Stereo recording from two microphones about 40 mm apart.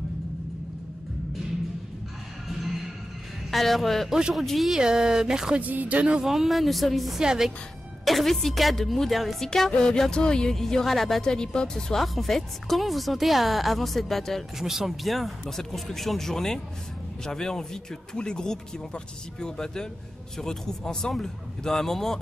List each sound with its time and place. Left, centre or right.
3.5 s speech: centre
4.1 s speech: centre
4.5 s speech: centre
4.7 s speech: centre
5.6 s speech: right
6.2 s speech: centre
7.2 s speech: centre
8.0 s speech: centre
9.8 s speech: centre
11.2 s speech: centre
14.6 s speech: centre